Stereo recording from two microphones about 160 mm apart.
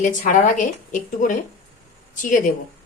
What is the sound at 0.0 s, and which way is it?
A woman's voice, 50° left (ahead or behind).